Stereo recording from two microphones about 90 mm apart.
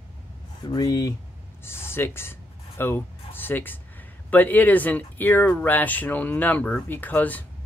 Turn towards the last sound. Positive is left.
turn(degrees=20)  # may be behind; listen again after turning